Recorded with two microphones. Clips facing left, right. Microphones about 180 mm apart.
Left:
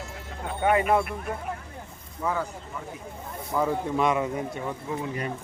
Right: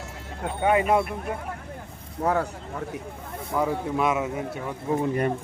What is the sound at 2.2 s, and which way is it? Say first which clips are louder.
Speech: right 4 dB; 65° right (ahead or behind).